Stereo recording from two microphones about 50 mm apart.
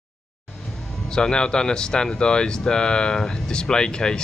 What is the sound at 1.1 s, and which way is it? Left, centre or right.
Speech, centre.